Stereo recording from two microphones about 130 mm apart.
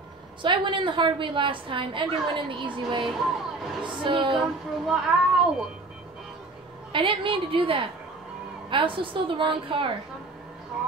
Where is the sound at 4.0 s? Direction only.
40° right (ahead or behind).